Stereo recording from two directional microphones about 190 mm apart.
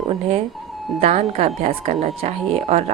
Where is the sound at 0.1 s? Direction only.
35° right (ahead or behind).